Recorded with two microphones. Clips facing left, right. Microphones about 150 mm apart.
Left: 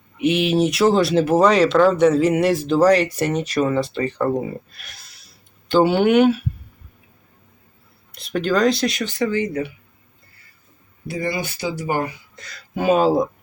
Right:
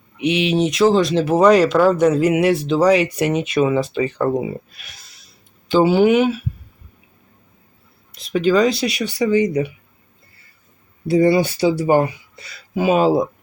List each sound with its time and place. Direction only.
0.2 s speech: centre (ahead or behind)
8.1 s speech: centre (ahead or behind); by 9.6 s 15° right (ahead or behind)
11.1 s speech: 30° right (ahead or behind)
12.4 s speech: 5° right (ahead or behind)